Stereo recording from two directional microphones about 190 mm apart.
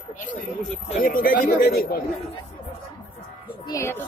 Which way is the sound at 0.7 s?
50° left (ahead or behind).